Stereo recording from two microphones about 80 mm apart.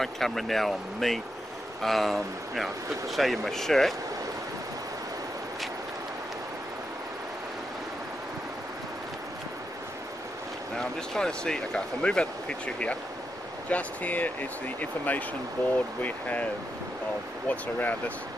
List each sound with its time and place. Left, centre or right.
0.0 s speech: centre
10.8 s speech: centre
17.5 s speech: left